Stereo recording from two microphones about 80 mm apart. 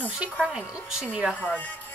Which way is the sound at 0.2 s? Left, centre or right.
Centre.